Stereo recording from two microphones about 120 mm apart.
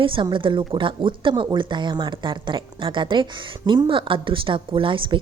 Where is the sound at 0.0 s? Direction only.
45° right (ahead or behind).